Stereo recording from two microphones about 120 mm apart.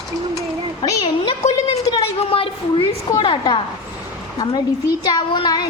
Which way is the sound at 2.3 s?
50° left (ahead or behind).